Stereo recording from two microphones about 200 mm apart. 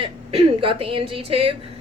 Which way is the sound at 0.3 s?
30° right (ahead or behind).